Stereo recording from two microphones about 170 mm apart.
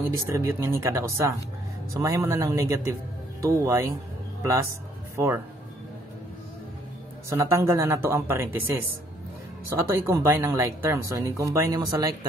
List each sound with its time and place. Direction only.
0.4 s speech: 15° right (ahead or behind)
5.1 s speech: 15° right (ahead or behind)
7.2 s speech: 15° right (ahead or behind)